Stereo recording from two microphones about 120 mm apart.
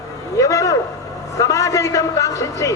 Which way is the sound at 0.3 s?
25° left (ahead or behind).